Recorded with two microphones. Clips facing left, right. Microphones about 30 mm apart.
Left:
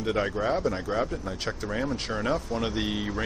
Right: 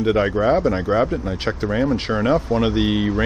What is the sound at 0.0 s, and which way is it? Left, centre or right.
Speech, right.